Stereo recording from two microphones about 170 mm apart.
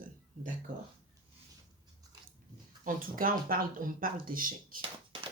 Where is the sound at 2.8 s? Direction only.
55° right (ahead or behind).